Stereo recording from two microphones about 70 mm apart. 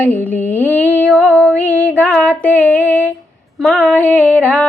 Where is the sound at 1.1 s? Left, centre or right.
Centre.